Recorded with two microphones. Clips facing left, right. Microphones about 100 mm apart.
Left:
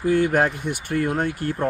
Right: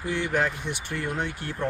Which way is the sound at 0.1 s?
45° left (ahead or behind).